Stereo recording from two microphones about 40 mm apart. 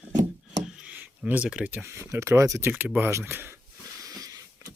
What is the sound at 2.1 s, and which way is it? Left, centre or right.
Speech, right.